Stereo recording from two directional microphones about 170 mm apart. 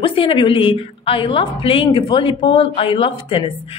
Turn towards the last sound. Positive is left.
turn(degrees=35)  # may be behind; listen again after turning